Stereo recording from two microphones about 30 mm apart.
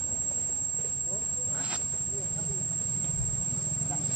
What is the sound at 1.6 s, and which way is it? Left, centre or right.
Cricket, right.